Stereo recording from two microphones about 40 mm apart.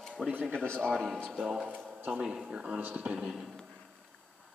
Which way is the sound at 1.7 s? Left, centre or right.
Right.